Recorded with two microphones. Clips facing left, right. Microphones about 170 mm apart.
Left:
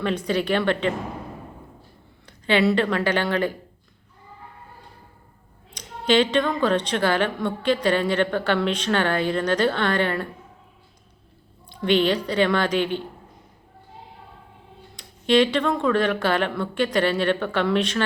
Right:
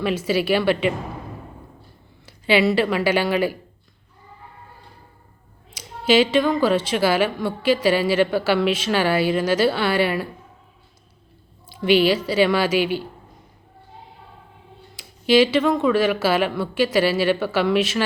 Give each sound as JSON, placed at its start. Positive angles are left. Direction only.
{"t": 0.0, "sound": "a woman's voice", "side_deg": -5}
{"t": 2.2, "sound": "speech", "side_deg": -5}
{"t": 5.7, "sound": "a woman's voice", "side_deg": -5}
{"t": 11.7, "sound": "a woman's voice", "side_deg": -5}
{"t": 14.9, "sound": "speech", "side_deg": -5}